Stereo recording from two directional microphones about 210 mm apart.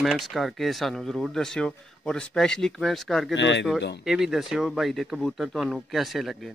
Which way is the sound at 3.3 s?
60° left (ahead or behind).